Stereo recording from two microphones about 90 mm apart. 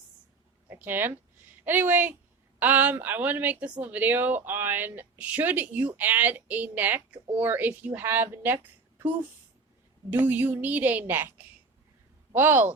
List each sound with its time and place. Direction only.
0.7 s speech: 25° right (ahead or behind)
10.1 s speech: 20° right (ahead or behind)